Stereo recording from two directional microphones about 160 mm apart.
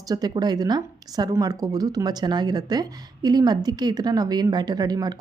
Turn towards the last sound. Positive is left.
turn(degrees=-25)  # may be behind; listen again after turning